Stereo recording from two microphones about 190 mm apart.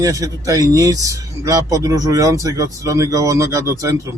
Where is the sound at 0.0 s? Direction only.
20° right (ahead or behind).